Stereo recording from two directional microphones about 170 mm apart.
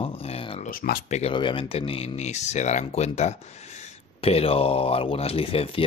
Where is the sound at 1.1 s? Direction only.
35° left (ahead or behind).